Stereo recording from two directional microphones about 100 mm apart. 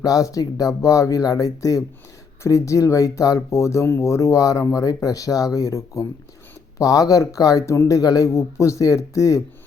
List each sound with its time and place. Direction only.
0.0 s speech: 35° left (ahead or behind)